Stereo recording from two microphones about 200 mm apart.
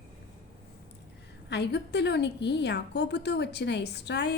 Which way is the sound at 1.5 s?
60° left (ahead or behind).